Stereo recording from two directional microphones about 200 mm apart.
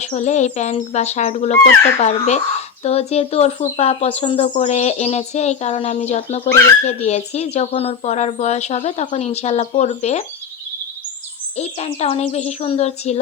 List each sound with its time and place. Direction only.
0.0 s speech: 35° left (ahead or behind)
11.5 s speech: 30° left (ahead or behind)